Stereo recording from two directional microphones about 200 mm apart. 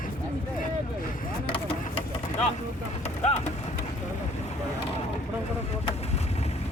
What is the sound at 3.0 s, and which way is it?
Speech, 30° left (ahead or behind).